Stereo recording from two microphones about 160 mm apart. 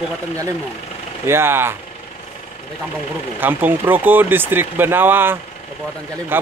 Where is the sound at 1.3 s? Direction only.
15° right (ahead or behind).